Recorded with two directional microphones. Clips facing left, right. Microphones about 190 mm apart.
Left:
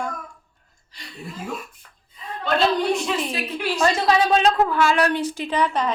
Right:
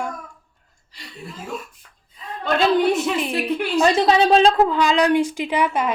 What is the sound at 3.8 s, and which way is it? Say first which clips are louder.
A woman's voice: right 3 dB; 25° right (ahead or behind).